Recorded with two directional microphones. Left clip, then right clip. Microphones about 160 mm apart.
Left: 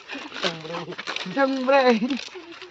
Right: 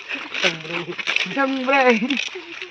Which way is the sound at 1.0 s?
35° left (ahead or behind).